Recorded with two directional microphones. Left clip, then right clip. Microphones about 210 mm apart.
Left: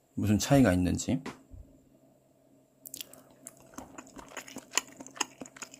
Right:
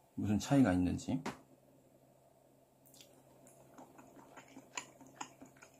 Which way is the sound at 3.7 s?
45° left (ahead or behind).